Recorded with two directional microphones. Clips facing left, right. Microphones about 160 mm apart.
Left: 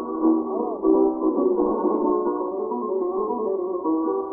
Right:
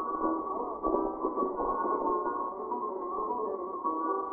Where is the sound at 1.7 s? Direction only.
30° left (ahead or behind).